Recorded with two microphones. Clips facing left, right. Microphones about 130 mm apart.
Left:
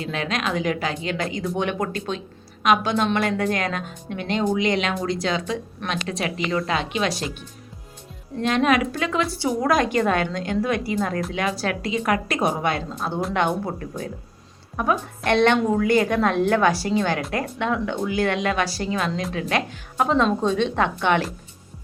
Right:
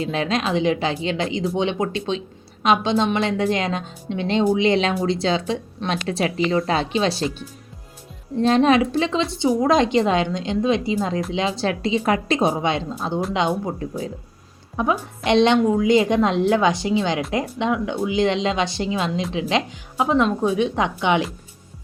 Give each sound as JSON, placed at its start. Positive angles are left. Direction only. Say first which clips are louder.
{"t": 0.0, "sound": "a woman's voice", "louder": "right 4 dB", "side_deg": -30}
{"t": 8.4, "sound": "a woman's voice", "louder": "right 4 dB", "side_deg": -30}
{"t": 14.8, "sound": "a woman's voice", "louder": "right 1 dB", "side_deg": -20}